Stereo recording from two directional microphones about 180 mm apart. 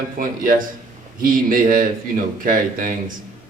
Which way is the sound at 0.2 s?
50° right (ahead or behind).